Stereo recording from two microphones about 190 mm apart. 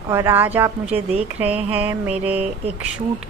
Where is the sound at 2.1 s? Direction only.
10° right (ahead or behind).